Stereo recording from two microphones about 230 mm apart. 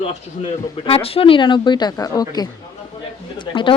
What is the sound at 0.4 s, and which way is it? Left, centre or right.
A woman's voice, left.